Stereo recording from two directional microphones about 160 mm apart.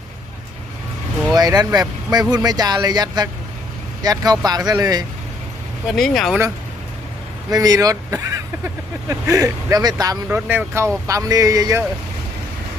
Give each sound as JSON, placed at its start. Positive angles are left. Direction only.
{"t": 1.4, "sound": "speech", "side_deg": -25}
{"t": 5.9, "sound": "speech", "side_deg": 0}
{"t": 7.5, "sound": "speech", "side_deg": -25}
{"t": 10.2, "sound": "speech", "side_deg": -10}